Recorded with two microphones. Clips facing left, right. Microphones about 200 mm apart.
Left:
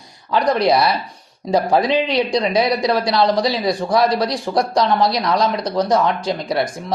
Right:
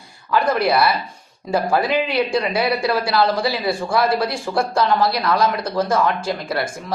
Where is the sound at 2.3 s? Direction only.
20° left (ahead or behind).